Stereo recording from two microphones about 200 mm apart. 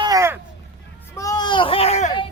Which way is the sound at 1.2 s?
20° left (ahead or behind).